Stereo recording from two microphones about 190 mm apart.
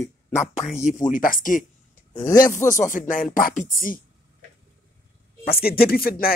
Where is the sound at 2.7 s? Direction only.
45° left (ahead or behind).